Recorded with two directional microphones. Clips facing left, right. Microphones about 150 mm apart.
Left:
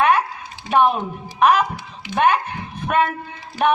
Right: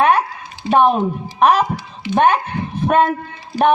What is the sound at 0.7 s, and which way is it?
Speech, 35° right (ahead or behind).